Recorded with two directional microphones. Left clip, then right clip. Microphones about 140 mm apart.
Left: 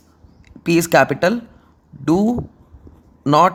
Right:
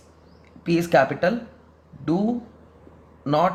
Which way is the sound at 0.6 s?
60° left (ahead or behind).